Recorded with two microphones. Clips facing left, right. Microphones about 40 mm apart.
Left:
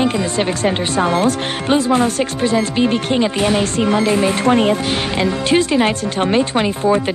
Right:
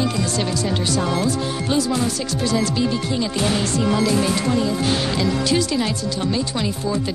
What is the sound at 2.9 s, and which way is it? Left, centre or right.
Speech, left.